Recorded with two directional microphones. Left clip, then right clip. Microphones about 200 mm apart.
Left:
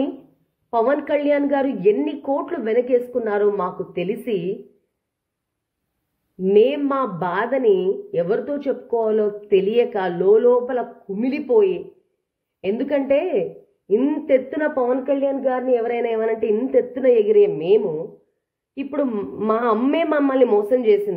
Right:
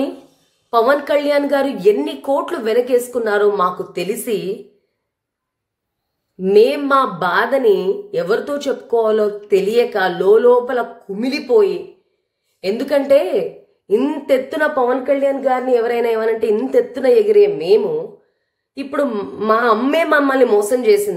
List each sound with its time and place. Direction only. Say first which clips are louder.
0.7 s a woman's voice: right 5 dB; 25° right (ahead or behind)
6.4 s a woman's voice: right 4 dB; 25° right (ahead or behind)